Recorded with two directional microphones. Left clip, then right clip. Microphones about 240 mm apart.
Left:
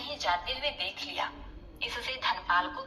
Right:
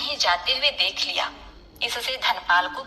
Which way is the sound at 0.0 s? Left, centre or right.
Right.